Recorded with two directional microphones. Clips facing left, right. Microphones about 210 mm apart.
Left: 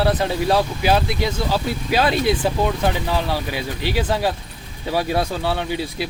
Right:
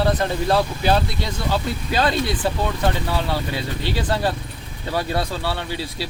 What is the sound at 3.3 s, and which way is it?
Speech, 15° left (ahead or behind).